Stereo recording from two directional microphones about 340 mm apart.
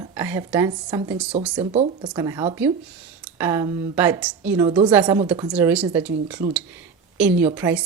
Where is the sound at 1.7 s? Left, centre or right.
Centre.